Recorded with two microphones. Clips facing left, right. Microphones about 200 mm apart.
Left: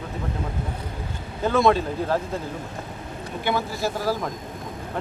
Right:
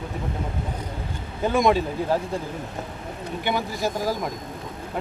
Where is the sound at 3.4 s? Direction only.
15° right (ahead or behind).